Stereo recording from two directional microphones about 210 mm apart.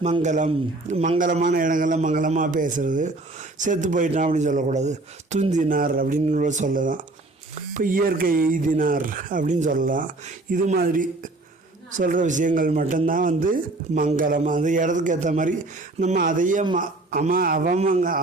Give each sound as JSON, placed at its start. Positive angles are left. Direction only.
{"t": 0.0, "sound": "a man's voice", "side_deg": -35}